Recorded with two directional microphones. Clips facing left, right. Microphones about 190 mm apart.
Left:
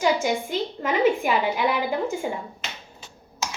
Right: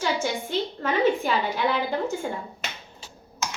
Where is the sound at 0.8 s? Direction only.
15° left (ahead or behind).